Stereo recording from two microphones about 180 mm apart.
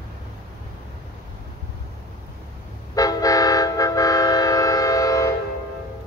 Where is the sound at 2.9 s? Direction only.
20° left (ahead or behind).